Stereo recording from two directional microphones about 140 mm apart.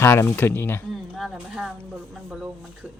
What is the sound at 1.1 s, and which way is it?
Speech, centre (ahead or behind).